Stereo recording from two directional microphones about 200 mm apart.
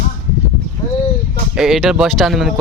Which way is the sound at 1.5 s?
Centre (ahead or behind).